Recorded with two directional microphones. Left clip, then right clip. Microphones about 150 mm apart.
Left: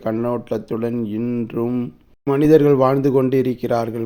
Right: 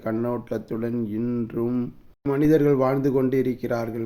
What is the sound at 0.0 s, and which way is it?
Speech, 25° left (ahead or behind).